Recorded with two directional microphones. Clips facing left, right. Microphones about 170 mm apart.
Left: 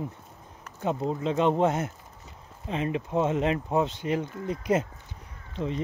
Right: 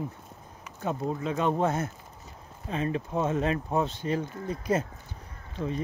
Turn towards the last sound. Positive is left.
turn(degrees=20)  # may be behind; listen again after turning